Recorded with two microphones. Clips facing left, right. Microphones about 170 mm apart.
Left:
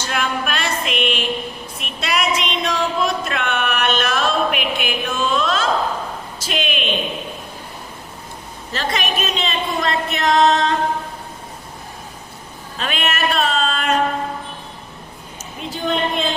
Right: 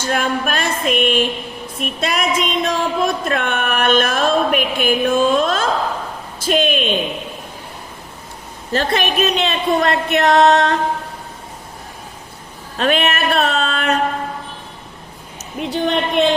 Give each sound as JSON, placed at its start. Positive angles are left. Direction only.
{"t": 0.0, "sound": "a sound", "side_deg": -45}
{"t": 6.4, "sound": "speech", "side_deg": -50}
{"t": 8.7, "sound": "a woman's voice", "side_deg": -55}
{"t": 12.7, "sound": "a woman's voice", "side_deg": -55}
{"t": 15.7, "sound": "a woman's voice", "side_deg": -70}